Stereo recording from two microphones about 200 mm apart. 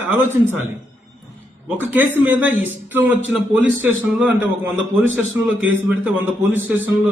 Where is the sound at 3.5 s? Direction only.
10° right (ahead or behind).